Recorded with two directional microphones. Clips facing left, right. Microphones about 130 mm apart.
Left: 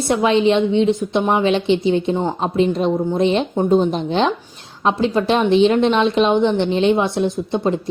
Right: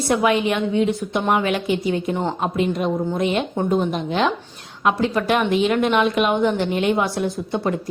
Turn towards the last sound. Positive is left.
turn(degrees=20)  # may be behind; listen again after turning